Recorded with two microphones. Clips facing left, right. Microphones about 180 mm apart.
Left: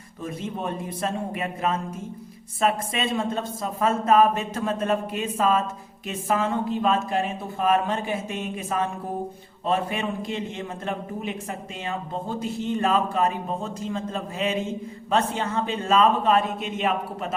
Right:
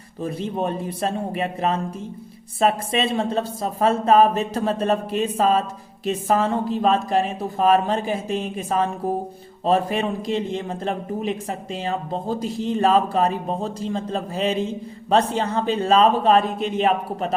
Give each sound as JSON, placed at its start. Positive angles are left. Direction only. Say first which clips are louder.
{"t": 0.2, "sound": "speech", "louder": "right 6 dB", "side_deg": -35}